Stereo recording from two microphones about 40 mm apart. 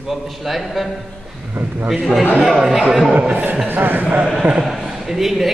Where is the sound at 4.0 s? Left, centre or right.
Right.